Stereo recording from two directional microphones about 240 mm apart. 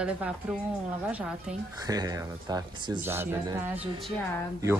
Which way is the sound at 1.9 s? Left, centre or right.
Centre.